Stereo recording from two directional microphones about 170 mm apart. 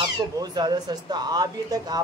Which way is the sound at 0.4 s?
25° right (ahead or behind).